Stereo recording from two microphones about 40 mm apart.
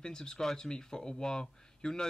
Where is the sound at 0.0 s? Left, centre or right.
Centre.